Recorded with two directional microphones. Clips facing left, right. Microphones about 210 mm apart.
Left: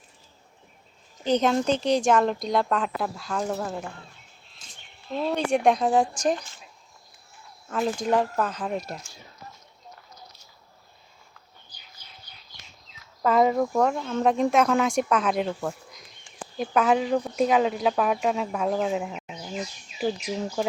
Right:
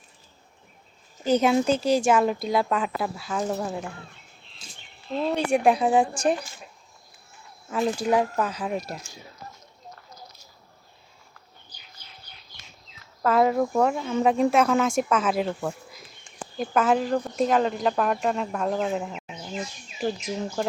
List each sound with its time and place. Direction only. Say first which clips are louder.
1.2 s speech: right 2 dB; 10° right (ahead or behind)
5.2 s speech: right 1 dB; 10° right (ahead or behind)
7.7 s speech: right 1 dB; 5° right (ahead or behind)
13.2 s speech: even; centre (ahead or behind)